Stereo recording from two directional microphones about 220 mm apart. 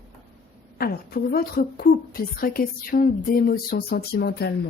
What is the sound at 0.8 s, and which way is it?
A woman's voice, 45° left (ahead or behind).